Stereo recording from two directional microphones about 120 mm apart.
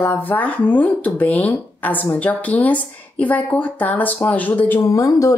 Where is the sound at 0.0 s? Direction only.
20° left (ahead or behind).